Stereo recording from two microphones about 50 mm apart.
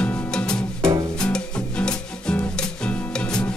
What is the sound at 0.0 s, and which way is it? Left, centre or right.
Music, centre.